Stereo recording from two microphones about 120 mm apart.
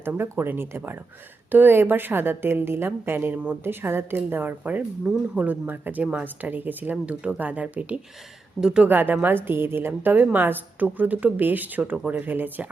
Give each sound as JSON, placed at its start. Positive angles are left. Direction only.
{"t": 0.0, "sound": "a woman's voice", "side_deg": -20}